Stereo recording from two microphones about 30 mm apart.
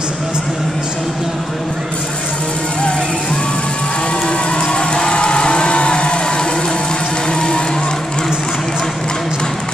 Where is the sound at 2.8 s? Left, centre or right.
Left.